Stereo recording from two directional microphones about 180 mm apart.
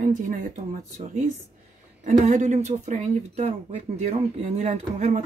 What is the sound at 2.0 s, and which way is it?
Speech, 40° right (ahead or behind).